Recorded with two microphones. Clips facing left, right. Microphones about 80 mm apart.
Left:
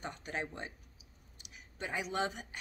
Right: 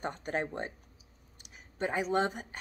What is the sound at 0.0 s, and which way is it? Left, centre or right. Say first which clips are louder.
Speech: right 6 dB; right.